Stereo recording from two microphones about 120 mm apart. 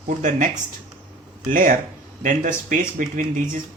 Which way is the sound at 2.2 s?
90° right.